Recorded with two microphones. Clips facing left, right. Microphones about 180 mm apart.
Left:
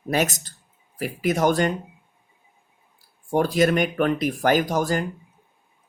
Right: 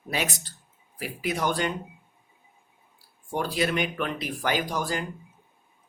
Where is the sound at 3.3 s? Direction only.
45° left (ahead or behind).